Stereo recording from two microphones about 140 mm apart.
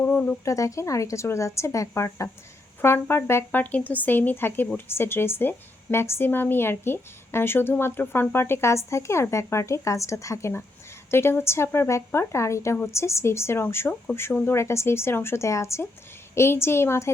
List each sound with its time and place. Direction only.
0.0 s speech: 10° left (ahead or behind)
0.5 s a woman's voice: 20° left (ahead or behind)